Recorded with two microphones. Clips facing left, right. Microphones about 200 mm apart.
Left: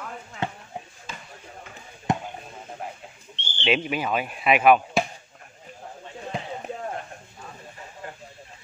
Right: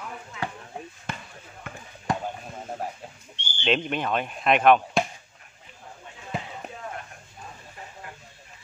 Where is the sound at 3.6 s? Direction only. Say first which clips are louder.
Left 1 dB; 5° left (ahead or behind).